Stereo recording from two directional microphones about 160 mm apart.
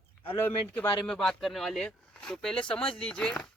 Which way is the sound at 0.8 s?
5° left (ahead or behind).